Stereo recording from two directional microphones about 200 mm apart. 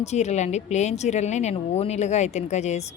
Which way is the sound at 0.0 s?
35° left (ahead or behind).